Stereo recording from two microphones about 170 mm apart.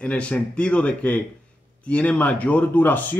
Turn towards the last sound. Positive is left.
turn(degrees=10)  # may be behind; listen again after turning